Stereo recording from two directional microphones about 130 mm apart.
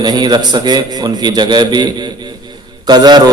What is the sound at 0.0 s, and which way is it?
A man's voice, 35° right (ahead or behind).